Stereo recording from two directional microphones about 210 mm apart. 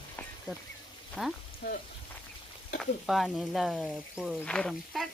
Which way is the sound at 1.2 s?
5° right (ahead or behind).